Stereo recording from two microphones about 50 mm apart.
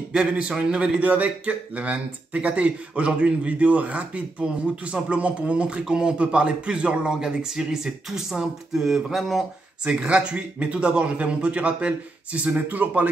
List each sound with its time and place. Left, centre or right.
0.1 s a man's voice: right; by 9.4 s centre
9.8 s a man's voice: centre